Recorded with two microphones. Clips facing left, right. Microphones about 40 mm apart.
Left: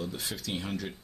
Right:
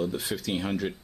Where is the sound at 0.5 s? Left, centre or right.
Right.